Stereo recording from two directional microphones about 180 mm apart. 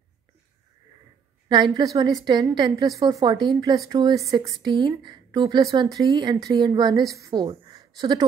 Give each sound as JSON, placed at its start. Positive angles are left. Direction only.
{"t": 1.5, "sound": "speech", "side_deg": -20}